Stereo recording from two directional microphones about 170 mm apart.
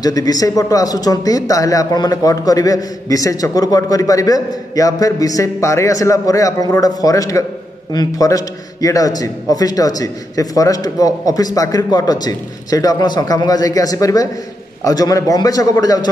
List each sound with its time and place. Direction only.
0.0 s speech: 20° left (ahead or behind)